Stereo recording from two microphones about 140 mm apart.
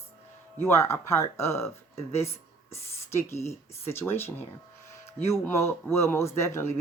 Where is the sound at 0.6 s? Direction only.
20° left (ahead or behind).